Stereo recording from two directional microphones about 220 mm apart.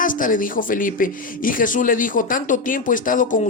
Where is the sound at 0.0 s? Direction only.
40° left (ahead or behind).